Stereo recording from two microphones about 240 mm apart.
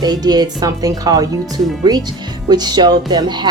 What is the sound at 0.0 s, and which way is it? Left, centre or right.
Speech, centre.